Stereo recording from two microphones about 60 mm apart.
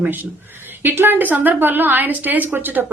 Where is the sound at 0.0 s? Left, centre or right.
Right.